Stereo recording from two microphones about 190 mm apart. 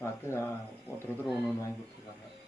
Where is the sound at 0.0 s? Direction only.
15° left (ahead or behind).